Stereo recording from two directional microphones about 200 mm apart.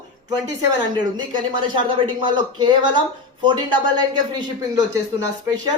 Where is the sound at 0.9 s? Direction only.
25° right (ahead or behind).